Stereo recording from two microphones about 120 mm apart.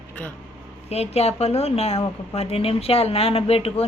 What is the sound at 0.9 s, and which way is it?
A woman's voice, 60° left (ahead or behind).